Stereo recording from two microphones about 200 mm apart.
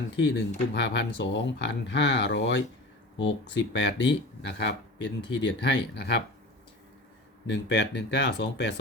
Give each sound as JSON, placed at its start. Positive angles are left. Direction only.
{"t": 0.2, "sound": "speech", "side_deg": 65}
{"t": 7.4, "sound": "speech", "side_deg": 65}